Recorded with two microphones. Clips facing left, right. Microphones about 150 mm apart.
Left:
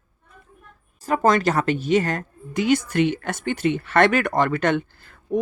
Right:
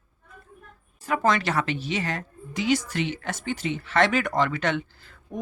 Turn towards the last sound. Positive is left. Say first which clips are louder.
# left 13 dB
turn(degrees=50)  # may be behind; listen again after turning